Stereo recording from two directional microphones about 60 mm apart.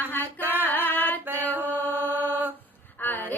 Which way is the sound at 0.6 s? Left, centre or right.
Left.